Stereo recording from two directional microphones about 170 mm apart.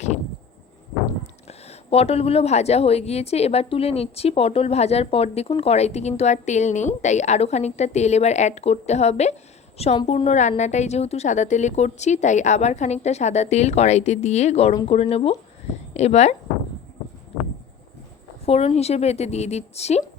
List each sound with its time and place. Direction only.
1.5 s a woman's voice: 40° left (ahead or behind)
18.4 s speech: 40° left (ahead or behind)